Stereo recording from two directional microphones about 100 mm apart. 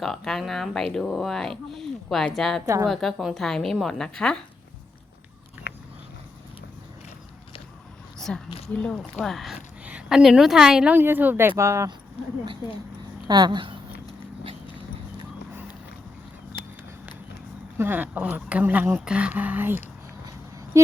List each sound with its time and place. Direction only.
0.0 s speech: 5° left (ahead or behind)
8.3 s speech: 10° left (ahead or behind)
9.1 s speech: centre (ahead or behind)
9.6 s speech: 10° right (ahead or behind)
10.9 s speech: 20° right (ahead or behind)
13.2 s speech: 45° right (ahead or behind)
17.7 s speech: 20° right (ahead or behind)